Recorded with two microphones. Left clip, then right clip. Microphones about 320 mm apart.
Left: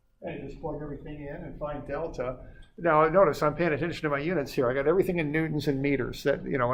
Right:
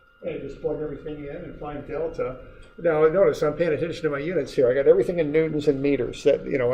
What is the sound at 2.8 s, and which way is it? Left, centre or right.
Speech, left.